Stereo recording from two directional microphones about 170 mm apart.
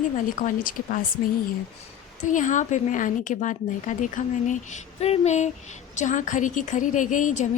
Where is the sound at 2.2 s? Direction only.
50° left (ahead or behind).